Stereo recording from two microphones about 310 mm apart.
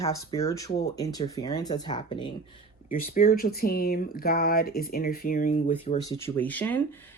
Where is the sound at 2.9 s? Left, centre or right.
Left.